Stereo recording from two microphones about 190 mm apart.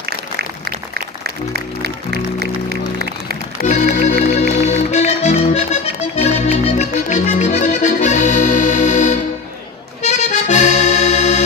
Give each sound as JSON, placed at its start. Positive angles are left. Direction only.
{"t": 0.0, "sound": "applause", "side_deg": -55}
{"t": 1.5, "sound": "music", "side_deg": -60}
{"t": 3.7, "sound": "music", "side_deg": 40}
{"t": 10.0, "sound": "accordion", "side_deg": 35}